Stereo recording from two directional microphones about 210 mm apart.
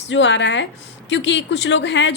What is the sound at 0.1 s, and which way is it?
A woman's voice, 60° left (ahead or behind).